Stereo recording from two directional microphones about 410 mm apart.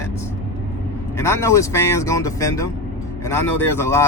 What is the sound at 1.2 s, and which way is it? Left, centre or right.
Speech, centre.